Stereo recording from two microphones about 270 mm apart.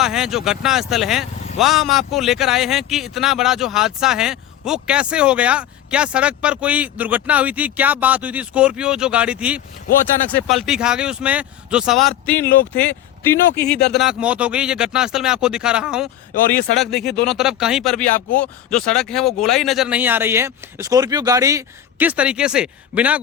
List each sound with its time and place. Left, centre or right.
0.0 s speech: centre
13.5 s speech: left
13.9 s speech: centre